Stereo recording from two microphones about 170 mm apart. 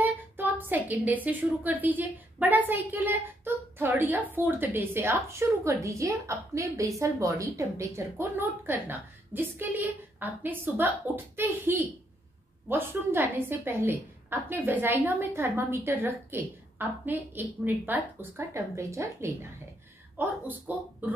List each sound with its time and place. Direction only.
0.0 s a woman's voice: 10° right (ahead or behind)